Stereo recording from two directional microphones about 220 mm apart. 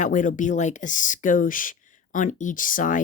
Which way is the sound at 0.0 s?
35° left (ahead or behind).